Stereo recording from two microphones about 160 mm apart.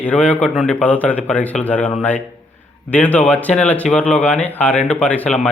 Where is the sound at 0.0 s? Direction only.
10° left (ahead or behind).